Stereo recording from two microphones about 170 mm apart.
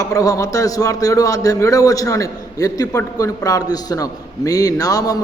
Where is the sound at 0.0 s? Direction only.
20° left (ahead or behind).